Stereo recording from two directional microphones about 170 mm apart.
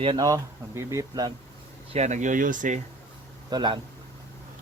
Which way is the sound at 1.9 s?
40° right (ahead or behind).